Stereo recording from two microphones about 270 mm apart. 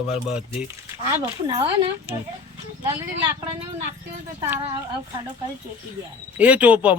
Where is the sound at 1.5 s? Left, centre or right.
Right.